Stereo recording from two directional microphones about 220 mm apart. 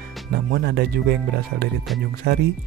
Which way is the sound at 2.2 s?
45° right (ahead or behind).